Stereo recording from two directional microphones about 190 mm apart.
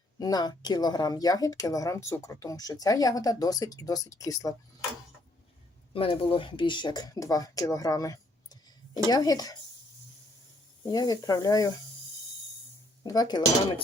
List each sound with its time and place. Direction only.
0.2 s speech: 20° left (ahead or behind)
5.9 s speech: 30° left (ahead or behind)
10.8 s speech: 20° left (ahead or behind)
13.0 s speech: 20° left (ahead or behind)